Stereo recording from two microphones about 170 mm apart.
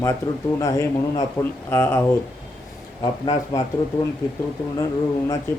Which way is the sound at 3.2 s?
20° left (ahead or behind).